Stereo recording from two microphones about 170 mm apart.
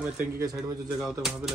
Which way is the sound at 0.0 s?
10° right (ahead or behind).